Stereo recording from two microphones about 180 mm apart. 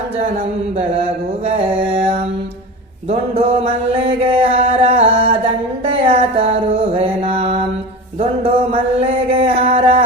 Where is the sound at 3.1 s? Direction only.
35° right (ahead or behind).